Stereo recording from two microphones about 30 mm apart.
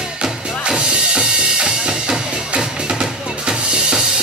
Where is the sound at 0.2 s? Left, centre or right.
Right.